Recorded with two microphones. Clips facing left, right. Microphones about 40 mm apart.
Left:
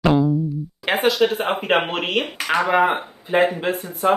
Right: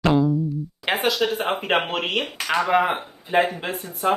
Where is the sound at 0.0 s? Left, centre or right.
Centre.